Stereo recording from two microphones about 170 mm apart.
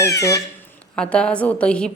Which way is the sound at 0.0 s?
20° left (ahead or behind).